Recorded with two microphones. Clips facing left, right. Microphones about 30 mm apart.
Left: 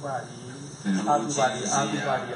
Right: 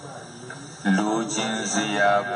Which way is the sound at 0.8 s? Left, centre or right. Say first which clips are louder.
Right 2 dB; right.